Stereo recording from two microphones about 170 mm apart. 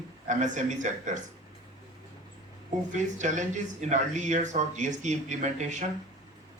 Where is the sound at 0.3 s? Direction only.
45° right (ahead or behind).